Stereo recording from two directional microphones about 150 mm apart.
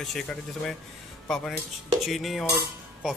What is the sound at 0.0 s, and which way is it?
Speech, centre (ahead or behind).